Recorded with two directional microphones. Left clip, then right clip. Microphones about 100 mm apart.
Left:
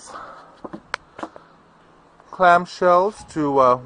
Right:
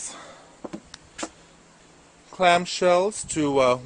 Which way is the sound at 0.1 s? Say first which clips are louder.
Left 6 dB; 15° right (ahead or behind).